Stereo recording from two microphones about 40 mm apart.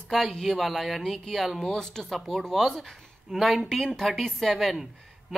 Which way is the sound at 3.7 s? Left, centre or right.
Centre.